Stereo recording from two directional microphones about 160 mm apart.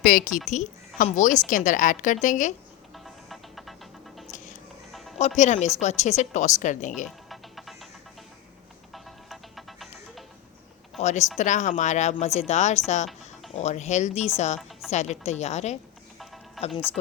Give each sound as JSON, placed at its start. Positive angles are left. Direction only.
{"t": 0.0, "sound": "a woman's voice", "side_deg": 60}
{"t": 0.5, "sound": "a woman's voice", "side_deg": 50}
{"t": 2.9, "sound": "music", "side_deg": 0}
{"t": 4.9, "sound": "music", "side_deg": 0}
{"t": 5.4, "sound": "speech", "side_deg": 45}
{"t": 7.3, "sound": "music", "side_deg": 0}
{"t": 8.9, "sound": "music", "side_deg": 0}
{"t": 11.0, "sound": "speech", "side_deg": 45}